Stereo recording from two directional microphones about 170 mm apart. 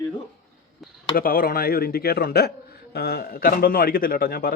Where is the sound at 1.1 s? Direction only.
60° left (ahead or behind).